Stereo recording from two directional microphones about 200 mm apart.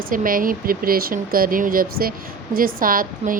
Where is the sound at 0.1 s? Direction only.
45° right (ahead or behind).